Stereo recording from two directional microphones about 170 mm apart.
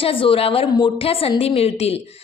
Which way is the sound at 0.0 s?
30° left (ahead or behind).